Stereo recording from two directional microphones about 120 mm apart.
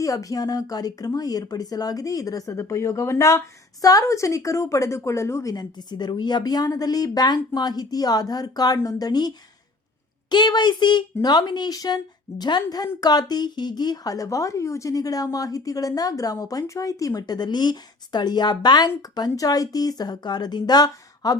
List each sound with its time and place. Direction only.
0.0 s speech: 30° left (ahead or behind)